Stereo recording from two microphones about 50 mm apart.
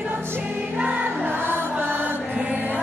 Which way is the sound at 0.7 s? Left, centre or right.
Right.